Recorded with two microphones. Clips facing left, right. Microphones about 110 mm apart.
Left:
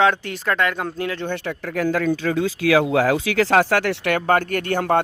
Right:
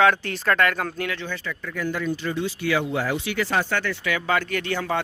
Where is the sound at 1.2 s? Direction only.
65° left (ahead or behind).